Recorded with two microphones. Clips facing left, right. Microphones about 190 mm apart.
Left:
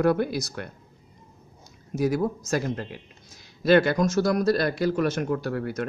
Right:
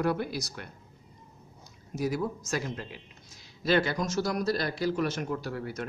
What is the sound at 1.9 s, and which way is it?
A man's voice, 50° left (ahead or behind).